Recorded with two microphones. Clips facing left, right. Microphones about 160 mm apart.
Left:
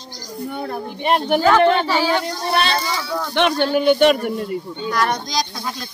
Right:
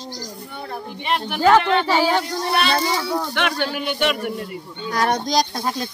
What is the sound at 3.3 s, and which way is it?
Speech, 30° left (ahead or behind).